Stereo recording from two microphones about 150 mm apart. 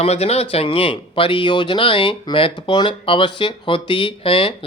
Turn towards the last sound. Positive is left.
turn(degrees=35)  # may be behind; listen again after turning